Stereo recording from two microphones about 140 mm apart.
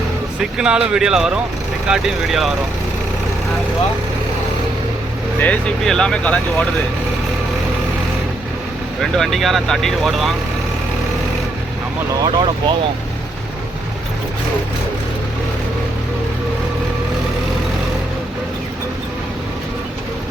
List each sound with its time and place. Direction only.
0.5 s speech: 5° right (ahead or behind)
5.4 s speech: 10° left (ahead or behind)
9.0 s speech: centre (ahead or behind)
12.2 s speech: 35° right (ahead or behind)